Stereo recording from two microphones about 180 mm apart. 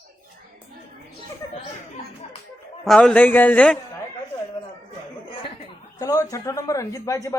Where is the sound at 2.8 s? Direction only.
5° left (ahead or behind).